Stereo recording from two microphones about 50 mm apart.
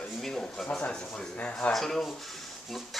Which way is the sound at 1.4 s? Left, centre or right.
Left.